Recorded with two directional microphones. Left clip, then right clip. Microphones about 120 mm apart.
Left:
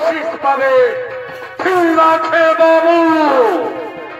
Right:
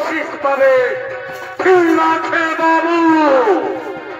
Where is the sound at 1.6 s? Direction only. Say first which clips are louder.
Even; 20° left (ahead or behind).